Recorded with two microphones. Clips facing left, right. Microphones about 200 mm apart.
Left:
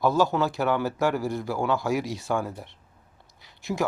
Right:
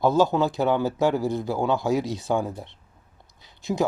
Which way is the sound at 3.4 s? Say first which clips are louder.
Right 3 dB; 20° right (ahead or behind).